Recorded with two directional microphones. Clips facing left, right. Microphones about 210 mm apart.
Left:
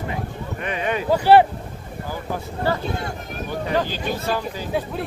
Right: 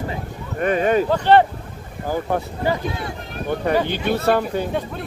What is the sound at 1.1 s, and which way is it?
Speech, 10° left (ahead or behind).